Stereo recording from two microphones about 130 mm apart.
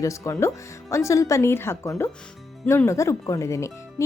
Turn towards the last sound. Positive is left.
turn(degrees=20)  # may be behind; listen again after turning